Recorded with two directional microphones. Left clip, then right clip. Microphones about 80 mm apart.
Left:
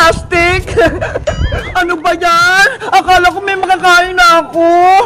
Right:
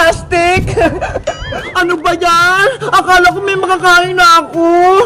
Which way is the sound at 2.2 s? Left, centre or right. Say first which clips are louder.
Left 1 dB; left.